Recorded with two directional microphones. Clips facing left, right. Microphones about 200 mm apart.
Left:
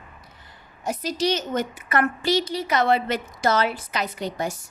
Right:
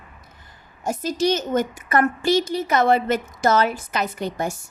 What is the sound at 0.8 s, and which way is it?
A woman's voice, 45° right (ahead or behind).